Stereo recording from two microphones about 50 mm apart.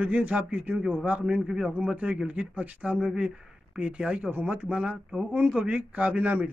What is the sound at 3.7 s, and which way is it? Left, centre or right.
Speech, right.